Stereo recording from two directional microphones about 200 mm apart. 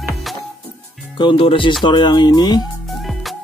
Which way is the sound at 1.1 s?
25° left (ahead or behind).